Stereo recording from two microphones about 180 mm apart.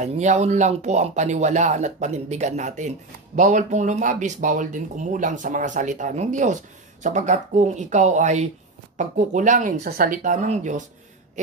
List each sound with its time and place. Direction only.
0.0 s speech: 40° right (ahead or behind)